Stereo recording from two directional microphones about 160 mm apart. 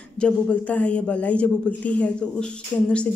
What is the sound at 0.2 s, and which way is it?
A woman's voice, 10° left (ahead or behind).